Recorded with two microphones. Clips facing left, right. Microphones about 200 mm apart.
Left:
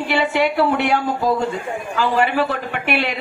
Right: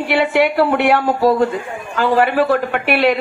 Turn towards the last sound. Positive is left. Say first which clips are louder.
# right 7 dB
turn(degrees=-55)  # may be behind; listen again after turning